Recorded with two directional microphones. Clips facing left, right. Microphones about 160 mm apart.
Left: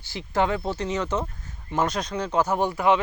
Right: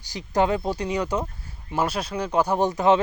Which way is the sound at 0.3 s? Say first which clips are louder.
Right 2 dB; 20° right (ahead or behind).